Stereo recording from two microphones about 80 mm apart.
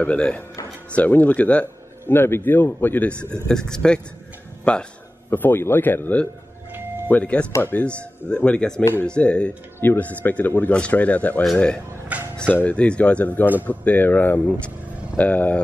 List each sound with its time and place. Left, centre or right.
0.0 s a man's voice: centre
3.4 s a man's voice: centre
12.1 s music: centre
12.6 s a man's voice: centre